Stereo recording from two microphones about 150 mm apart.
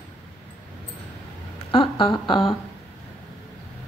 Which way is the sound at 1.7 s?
35° left (ahead or behind).